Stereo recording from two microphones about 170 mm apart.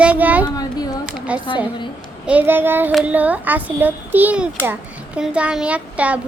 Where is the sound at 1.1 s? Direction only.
5° right (ahead or behind).